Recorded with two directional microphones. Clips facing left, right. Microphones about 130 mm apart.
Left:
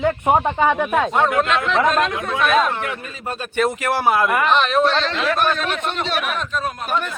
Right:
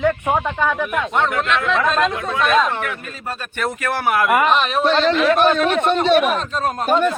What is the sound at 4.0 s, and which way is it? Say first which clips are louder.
Speech: left 1 dB; 25° left (ahead or behind).